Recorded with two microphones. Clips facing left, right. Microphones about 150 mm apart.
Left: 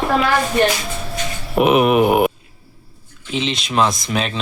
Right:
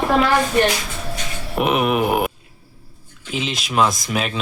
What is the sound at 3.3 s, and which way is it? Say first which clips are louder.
Speech: left 3 dB; 5° right (ahead or behind).